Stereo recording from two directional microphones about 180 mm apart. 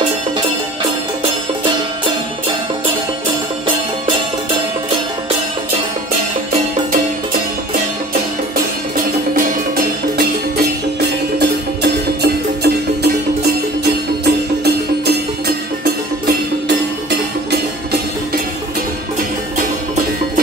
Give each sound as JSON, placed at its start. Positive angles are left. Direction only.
{"t": 11.3, "sound": "music", "side_deg": -65}
{"t": 14.2, "sound": "music", "side_deg": -65}